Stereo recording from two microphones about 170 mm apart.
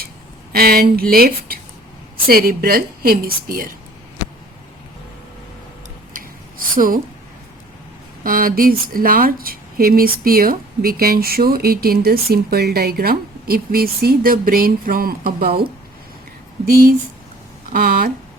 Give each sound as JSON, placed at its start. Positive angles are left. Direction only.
{"t": 0.5, "sound": "speech", "side_deg": -60}
{"t": 6.1, "sound": "a sound", "side_deg": -55}
{"t": 8.2, "sound": "speech", "side_deg": -55}
{"t": 16.6, "sound": "speech", "side_deg": -60}